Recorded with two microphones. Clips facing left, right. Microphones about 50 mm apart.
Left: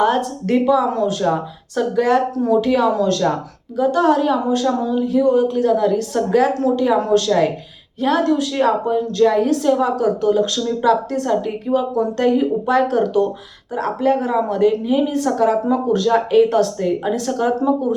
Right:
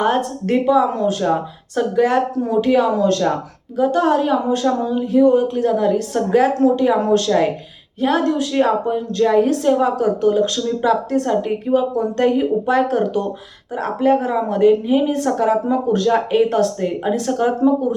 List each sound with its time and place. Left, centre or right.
0.0 s a woman's voice: right
16.0 s a woman's voice: centre